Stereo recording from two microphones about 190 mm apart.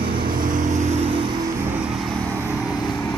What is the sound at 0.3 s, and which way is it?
Vehicle, 45° right (ahead or behind).